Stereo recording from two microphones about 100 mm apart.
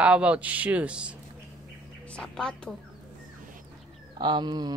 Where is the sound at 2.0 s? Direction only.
10° left (ahead or behind).